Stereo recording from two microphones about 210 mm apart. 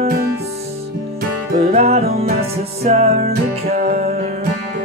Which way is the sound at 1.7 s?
30° right (ahead or behind).